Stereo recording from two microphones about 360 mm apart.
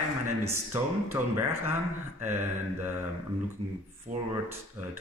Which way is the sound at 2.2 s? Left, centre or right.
Centre.